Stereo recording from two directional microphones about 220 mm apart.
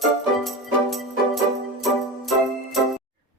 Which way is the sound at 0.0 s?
Centre (ahead or behind).